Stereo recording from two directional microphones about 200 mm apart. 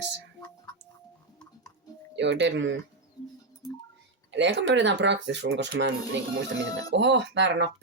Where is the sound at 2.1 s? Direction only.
60° right (ahead or behind).